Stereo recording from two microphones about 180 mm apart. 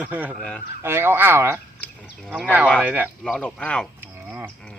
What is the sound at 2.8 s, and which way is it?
Speech, 10° right (ahead or behind).